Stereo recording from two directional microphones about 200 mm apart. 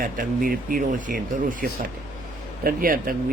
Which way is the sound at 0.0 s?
45° right (ahead or behind).